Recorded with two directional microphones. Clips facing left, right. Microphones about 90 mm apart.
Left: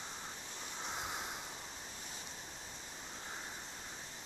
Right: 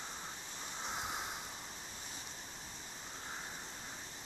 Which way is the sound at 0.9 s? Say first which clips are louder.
Right 1 dB; 15° right (ahead or behind).